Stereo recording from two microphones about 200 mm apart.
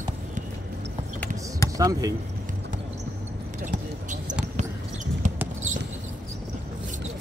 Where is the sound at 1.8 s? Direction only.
15° right (ahead or behind).